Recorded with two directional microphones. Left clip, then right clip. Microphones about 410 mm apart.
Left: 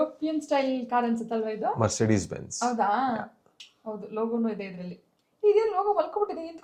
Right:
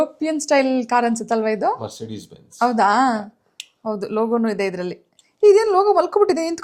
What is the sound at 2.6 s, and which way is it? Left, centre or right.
Speech, right.